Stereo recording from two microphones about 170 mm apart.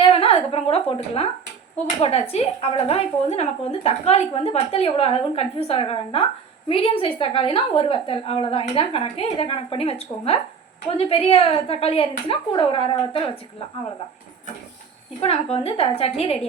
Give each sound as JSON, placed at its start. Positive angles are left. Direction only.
{"t": 0.0, "sound": "a sound", "side_deg": 35}
{"t": 2.0, "sound": "a woman's voice", "side_deg": 35}
{"t": 15.5, "sound": "a woman's voice", "side_deg": 35}